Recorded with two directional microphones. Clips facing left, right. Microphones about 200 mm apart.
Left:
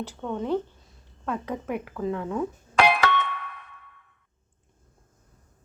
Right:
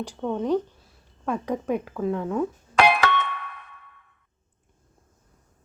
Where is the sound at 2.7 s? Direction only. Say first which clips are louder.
Right 1 dB; 65° right (ahead or behind).